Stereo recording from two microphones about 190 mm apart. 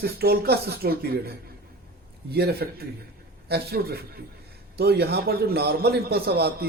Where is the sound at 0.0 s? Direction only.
55° right (ahead or behind).